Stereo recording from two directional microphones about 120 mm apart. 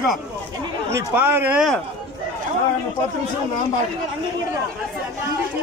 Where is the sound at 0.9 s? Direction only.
20° right (ahead or behind).